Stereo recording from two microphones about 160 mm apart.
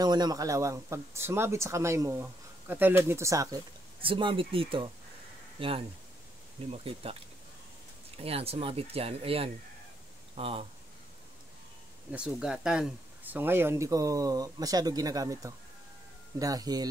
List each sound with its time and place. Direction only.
0.0 s speech: 25° right (ahead or behind)
4.0 s speech: 30° right (ahead or behind)
8.2 s speech: 40° right (ahead or behind)
12.1 s speech: 5° right (ahead or behind); by 16.8 s 25° right (ahead or behind)